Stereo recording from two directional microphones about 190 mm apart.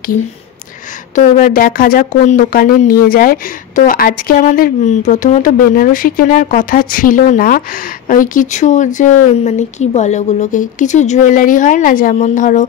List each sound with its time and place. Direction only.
1.1 s speech: 45° left (ahead or behind)